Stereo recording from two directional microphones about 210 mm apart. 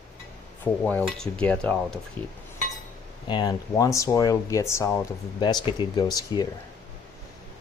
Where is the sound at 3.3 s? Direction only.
20° left (ahead or behind).